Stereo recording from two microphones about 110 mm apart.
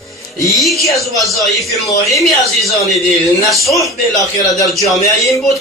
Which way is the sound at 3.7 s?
30° left (ahead or behind).